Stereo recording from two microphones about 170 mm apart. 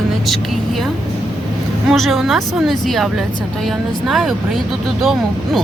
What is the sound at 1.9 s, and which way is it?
Speech, centre (ahead or behind).